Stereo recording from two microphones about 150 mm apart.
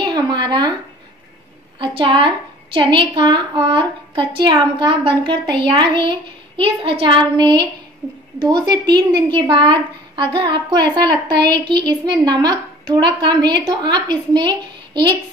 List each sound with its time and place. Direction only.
0.0 s speech: 25° right (ahead or behind)
1.8 s a woman's voice: 35° right (ahead or behind)